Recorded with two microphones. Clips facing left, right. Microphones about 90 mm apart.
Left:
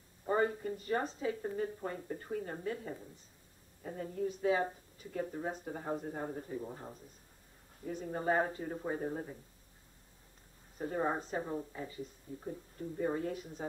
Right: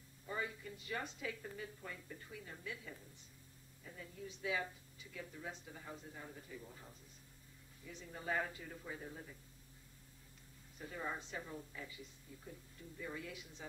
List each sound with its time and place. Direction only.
0.2 s speech: 45° left (ahead or behind)
10.8 s speech: 45° left (ahead or behind)